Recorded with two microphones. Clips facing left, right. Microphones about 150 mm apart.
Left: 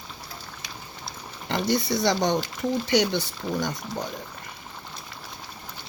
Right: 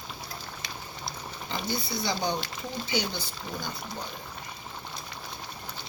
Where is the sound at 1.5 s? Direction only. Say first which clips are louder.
Left 9 dB; 80° left.